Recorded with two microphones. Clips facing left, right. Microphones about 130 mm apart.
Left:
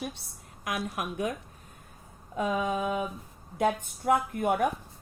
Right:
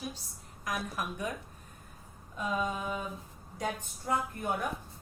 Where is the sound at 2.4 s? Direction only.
70° left (ahead or behind).